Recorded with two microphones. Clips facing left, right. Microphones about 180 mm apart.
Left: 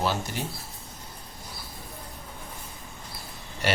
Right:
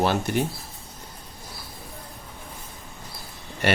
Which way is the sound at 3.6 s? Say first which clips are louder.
Right 4 dB; 55° right (ahead or behind).